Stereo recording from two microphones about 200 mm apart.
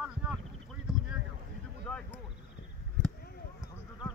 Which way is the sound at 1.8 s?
5° left (ahead or behind).